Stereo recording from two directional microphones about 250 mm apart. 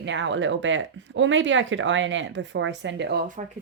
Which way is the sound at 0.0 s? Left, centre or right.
Right.